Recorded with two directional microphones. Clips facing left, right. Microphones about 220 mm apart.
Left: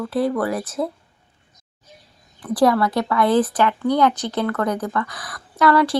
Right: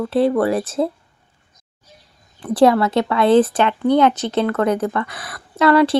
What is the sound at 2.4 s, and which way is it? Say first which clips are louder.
Speech: right 3 dB; 25° right (ahead or behind).